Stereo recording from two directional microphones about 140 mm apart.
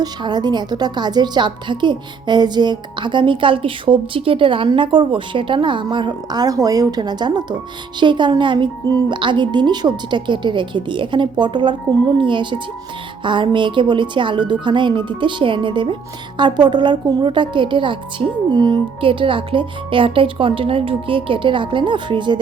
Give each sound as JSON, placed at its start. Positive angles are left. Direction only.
{"t": 0.0, "sound": "a woman's voice", "side_deg": -30}